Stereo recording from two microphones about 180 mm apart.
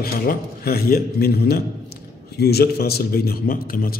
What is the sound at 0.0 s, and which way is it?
A man's voice, 55° left (ahead or behind).